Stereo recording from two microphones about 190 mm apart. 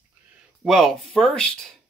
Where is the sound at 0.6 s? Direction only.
Centre (ahead or behind).